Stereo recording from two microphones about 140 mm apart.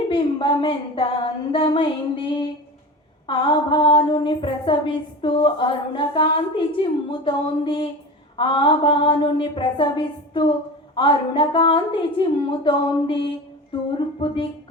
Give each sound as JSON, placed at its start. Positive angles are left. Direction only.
{"t": 0.1, "sound": "a woman's voice", "side_deg": 40}